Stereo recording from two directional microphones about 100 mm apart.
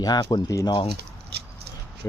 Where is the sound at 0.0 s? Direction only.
40° left (ahead or behind).